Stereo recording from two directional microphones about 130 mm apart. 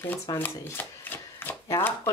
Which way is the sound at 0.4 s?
15° left (ahead or behind).